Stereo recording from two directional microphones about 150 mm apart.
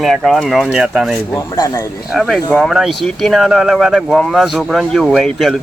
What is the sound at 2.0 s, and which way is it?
Speech, centre (ahead or behind).